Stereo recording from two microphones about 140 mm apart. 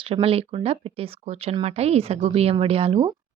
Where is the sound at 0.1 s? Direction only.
40° right (ahead or behind).